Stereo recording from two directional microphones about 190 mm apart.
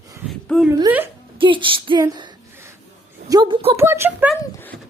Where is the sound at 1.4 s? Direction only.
25° right (ahead or behind).